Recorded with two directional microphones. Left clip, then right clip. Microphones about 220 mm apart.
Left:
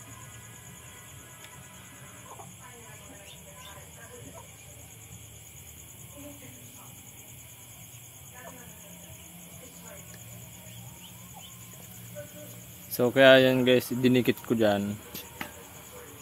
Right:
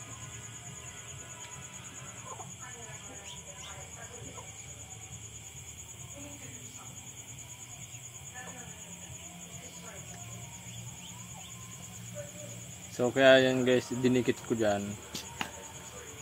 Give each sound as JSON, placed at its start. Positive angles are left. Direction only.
{"t": 12.9, "sound": "speech", "side_deg": 50}